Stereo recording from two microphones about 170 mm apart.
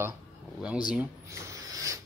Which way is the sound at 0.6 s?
5° right (ahead or behind).